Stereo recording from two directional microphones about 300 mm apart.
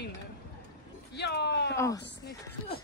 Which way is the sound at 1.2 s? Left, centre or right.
Left.